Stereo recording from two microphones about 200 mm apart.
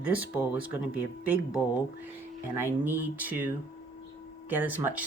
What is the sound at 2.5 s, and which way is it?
Speech, 10° right (ahead or behind).